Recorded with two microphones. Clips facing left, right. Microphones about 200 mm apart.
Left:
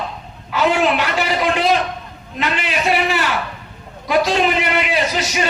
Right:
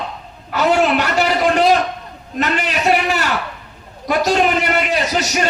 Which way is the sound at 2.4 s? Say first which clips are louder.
Right 2 dB; 45° right (ahead or behind).